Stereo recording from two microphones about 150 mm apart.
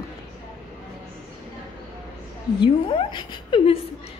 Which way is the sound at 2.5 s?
35° left (ahead or behind).